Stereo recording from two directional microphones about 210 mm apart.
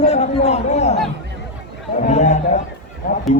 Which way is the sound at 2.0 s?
35° left (ahead or behind).